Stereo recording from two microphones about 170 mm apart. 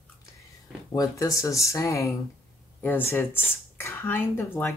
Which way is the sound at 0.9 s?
20° left (ahead or behind).